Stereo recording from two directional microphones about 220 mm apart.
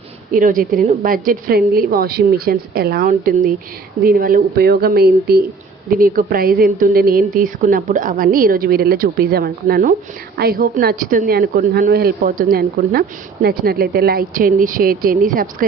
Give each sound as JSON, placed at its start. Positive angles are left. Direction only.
{"t": 0.3, "sound": "a woman's voice", "side_deg": -35}